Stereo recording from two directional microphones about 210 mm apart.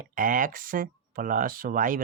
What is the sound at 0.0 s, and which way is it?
Speech, 40° right (ahead or behind).